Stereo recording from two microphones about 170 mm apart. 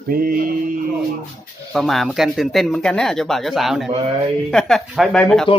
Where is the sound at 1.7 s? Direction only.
Centre (ahead or behind).